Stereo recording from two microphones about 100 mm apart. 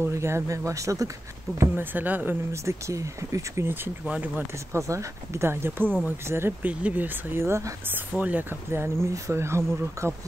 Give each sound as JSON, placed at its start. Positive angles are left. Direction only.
{"t": 0.0, "sound": "speech", "side_deg": -25}
{"t": 1.6, "sound": "speech", "side_deg": -20}
{"t": 2.5, "sound": "speech", "side_deg": -30}
{"t": 4.0, "sound": "speech", "side_deg": -15}
{"t": 4.7, "sound": "speech", "side_deg": -30}
{"t": 8.1, "sound": "speech", "side_deg": -15}